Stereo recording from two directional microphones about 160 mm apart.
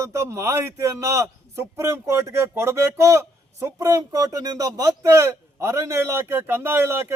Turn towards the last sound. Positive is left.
turn(degrees=-15)  # may be behind; listen again after turning